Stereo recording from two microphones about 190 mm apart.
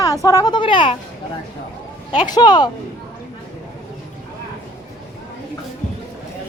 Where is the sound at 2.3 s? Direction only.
20° left (ahead or behind).